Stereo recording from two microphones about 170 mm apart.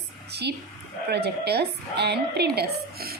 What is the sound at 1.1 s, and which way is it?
Speech, 75° right (ahead or behind).